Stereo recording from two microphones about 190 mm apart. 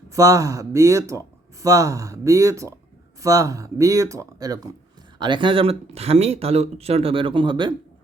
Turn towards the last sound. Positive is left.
turn(degrees=-25)  # may be behind; listen again after turning